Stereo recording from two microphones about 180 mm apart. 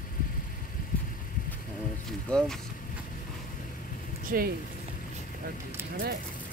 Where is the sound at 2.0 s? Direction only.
Centre (ahead or behind).